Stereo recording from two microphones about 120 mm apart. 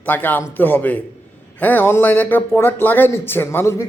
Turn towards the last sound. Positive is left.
turn(degrees=25)  # may be behind; listen again after turning